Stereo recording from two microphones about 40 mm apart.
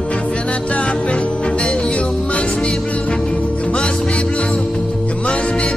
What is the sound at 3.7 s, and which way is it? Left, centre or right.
Music, left.